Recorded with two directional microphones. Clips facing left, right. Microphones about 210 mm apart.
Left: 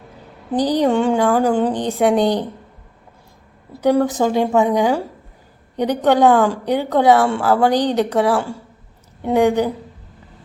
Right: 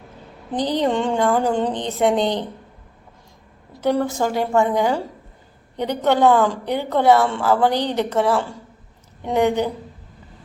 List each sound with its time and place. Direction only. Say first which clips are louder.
0.5 s a woman's voice: left 4 dB; 10° left (ahead or behind)
3.8 s a woman's voice: left 4 dB; 15° left (ahead or behind)